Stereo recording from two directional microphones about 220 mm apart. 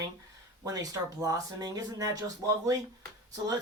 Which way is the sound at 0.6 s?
15° right (ahead or behind).